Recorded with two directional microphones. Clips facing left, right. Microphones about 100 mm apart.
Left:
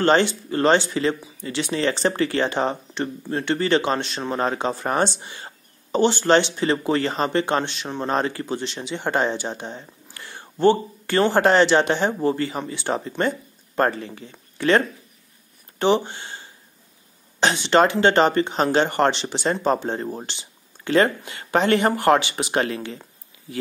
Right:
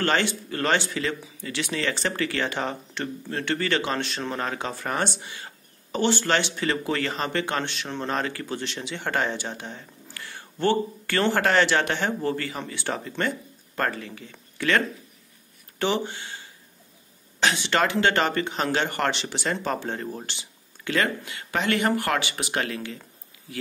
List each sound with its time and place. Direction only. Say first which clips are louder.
0.0 s speech: left 6 dB; 25° left (ahead or behind)
15.8 s speech: left 6 dB; 25° left (ahead or behind)